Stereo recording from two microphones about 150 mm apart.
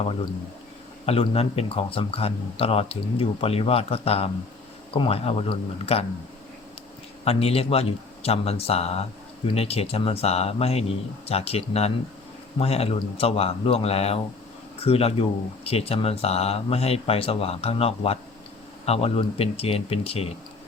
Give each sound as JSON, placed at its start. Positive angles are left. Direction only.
{"t": 1.0, "sound": "speech", "side_deg": 40}
{"t": 7.3, "sound": "speech", "side_deg": 40}